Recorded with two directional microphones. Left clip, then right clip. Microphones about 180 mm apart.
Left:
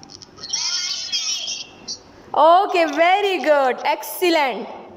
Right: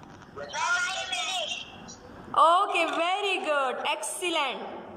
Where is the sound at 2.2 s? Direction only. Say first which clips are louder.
Left 7 dB; 35° left (ahead or behind).